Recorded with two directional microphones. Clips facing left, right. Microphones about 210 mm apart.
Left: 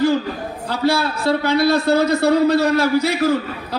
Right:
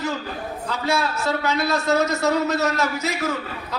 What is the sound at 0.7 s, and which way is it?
A man's voice, 30° left (ahead or behind).